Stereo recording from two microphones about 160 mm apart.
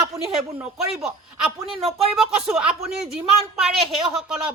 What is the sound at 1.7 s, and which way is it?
Speech, 35° right (ahead or behind).